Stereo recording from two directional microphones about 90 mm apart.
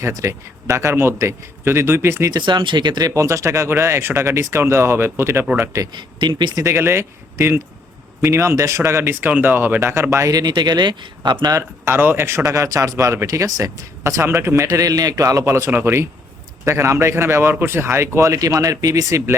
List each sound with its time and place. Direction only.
0.0 s speech: 35° right (ahead or behind)
2.4 s speech: 65° right (ahead or behind)
3.2 s speech: 35° right (ahead or behind)
5.5 s speech: 35° right (ahead or behind)
5.9 s speech: 60° right (ahead or behind)
6.6 s speech: 30° right (ahead or behind)
10.4 s speech: 55° right (ahead or behind)
11.5 s speech: 25° right (ahead or behind)
12.5 s speech: 40° right (ahead or behind)